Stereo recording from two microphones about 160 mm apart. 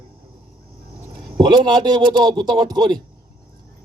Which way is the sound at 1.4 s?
30° right (ahead or behind).